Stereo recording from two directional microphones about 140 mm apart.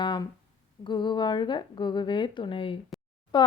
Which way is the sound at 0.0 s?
35° left (ahead or behind).